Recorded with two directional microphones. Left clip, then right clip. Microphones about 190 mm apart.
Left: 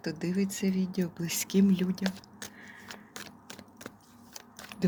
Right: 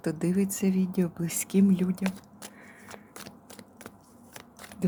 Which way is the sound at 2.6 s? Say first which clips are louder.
Even; 10° right (ahead or behind).